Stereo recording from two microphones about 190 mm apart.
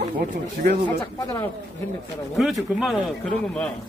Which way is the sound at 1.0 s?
15° left (ahead or behind).